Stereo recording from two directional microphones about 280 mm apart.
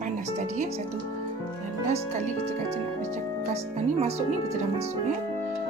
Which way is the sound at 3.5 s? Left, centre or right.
Right.